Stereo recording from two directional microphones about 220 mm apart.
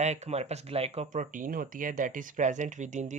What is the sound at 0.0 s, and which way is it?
Speech, 30° right (ahead or behind).